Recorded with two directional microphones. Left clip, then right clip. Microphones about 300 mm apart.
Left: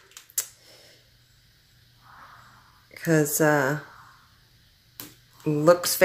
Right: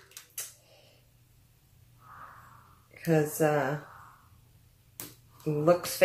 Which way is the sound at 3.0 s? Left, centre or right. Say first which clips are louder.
Left 5 dB; left.